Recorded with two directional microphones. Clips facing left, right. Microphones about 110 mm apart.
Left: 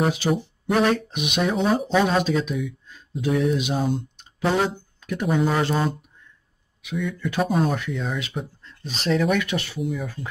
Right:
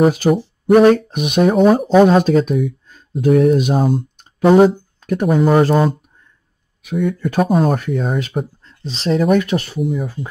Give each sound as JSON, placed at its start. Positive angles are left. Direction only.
{"t": 0.0, "sound": "speech", "side_deg": -45}
{"t": 8.8, "sound": "speech", "side_deg": -30}
{"t": 9.2, "sound": "speech", "side_deg": -40}
{"t": 9.8, "sound": "speech", "side_deg": 0}